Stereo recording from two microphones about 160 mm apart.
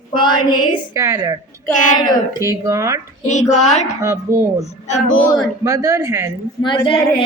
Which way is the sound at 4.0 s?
15° right (ahead or behind).